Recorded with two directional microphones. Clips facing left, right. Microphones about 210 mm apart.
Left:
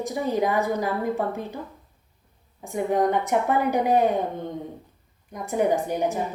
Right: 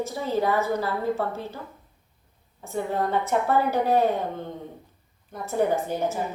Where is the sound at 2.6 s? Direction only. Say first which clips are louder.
Left 4 dB; 15° left (ahead or behind).